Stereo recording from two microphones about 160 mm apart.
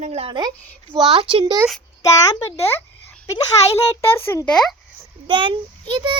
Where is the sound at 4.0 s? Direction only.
15° left (ahead or behind).